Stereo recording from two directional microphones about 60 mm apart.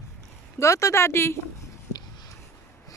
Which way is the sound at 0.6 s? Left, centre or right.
Left.